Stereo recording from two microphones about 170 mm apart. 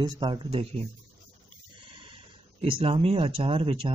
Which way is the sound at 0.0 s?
25° right (ahead or behind).